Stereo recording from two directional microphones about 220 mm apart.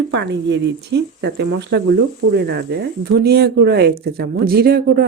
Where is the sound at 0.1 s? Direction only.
50° right (ahead or behind).